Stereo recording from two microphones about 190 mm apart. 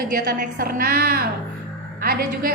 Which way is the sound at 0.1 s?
50° right (ahead or behind).